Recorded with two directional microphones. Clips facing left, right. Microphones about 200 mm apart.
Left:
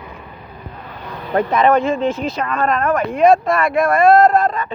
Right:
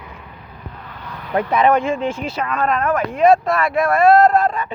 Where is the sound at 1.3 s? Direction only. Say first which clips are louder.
Left 1 dB; 10° right (ahead or behind).